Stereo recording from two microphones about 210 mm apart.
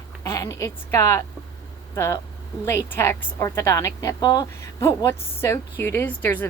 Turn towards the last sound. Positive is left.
turn(degrees=10)  # may be behind; listen again after turning